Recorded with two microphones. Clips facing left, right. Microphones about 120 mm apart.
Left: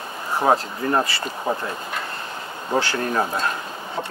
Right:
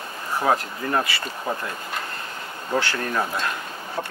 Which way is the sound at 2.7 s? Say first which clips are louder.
Left 2 dB; 30° left (ahead or behind).